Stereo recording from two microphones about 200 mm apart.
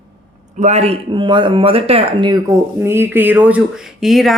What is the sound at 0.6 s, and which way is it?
Speech, 35° right (ahead or behind).